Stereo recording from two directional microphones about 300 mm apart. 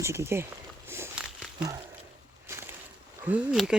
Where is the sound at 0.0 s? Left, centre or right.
Centre.